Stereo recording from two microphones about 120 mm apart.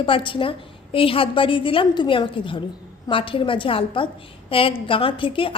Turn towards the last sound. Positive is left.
turn(degrees=45)  # may be behind; listen again after turning